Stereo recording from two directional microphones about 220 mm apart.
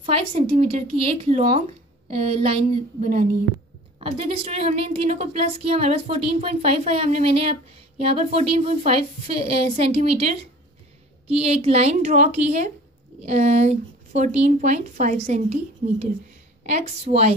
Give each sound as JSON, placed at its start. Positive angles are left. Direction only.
{"t": 0.0, "sound": "a woman's voice", "side_deg": -25}